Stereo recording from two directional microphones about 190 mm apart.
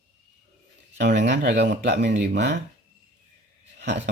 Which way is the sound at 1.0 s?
65° right (ahead or behind).